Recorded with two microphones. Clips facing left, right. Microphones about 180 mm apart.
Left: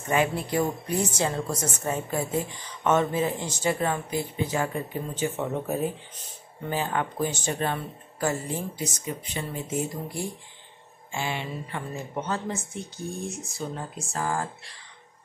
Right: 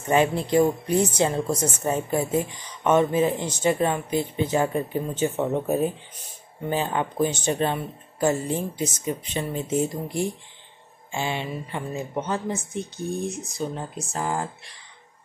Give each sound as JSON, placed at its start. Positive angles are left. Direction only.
{"t": 0.1, "sound": "a woman's voice", "side_deg": -25}
{"t": 11.1, "sound": "a woman's voice", "side_deg": -20}